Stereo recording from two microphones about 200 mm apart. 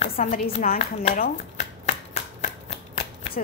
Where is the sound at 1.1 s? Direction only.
45° left (ahead or behind).